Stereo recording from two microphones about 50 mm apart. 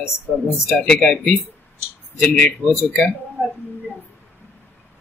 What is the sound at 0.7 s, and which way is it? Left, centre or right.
Speech, centre.